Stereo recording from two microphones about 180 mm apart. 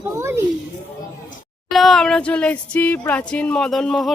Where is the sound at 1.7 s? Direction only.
Centre (ahead or behind).